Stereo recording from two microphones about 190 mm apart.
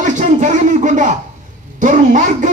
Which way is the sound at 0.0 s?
40° right (ahead or behind).